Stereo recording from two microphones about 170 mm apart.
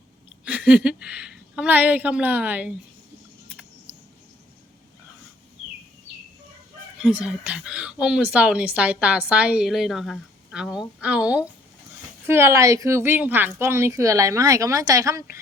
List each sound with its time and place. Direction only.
0.4 s a woman's voice: 5° right (ahead or behind)
7.0 s speech: 5° right (ahead or behind)